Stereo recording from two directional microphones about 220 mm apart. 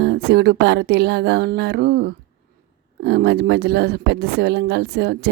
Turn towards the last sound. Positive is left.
turn(degrees=-50)  # may be behind; listen again after turning